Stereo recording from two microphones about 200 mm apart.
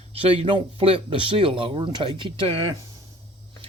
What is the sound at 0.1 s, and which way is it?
Speech, 30° right (ahead or behind).